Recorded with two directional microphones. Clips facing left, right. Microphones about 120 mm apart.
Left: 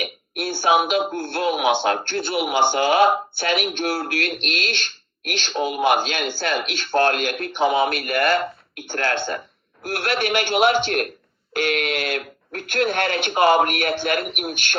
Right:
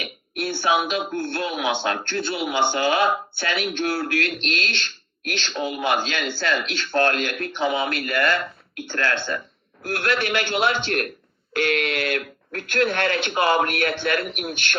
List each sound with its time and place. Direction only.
0.0 s speech: 20° left (ahead or behind)